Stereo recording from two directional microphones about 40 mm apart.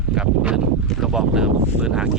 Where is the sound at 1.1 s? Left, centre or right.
Centre.